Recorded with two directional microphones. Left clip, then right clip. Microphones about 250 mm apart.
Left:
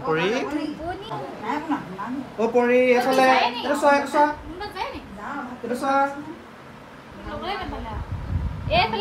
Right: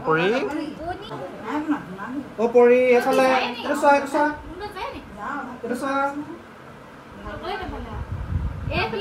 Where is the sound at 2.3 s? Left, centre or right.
Centre.